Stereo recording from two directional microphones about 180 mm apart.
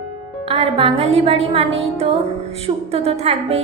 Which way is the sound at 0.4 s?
35° right (ahead or behind).